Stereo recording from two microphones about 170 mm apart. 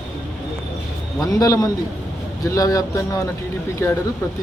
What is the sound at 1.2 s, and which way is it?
A man's voice, 20° left (ahead or behind).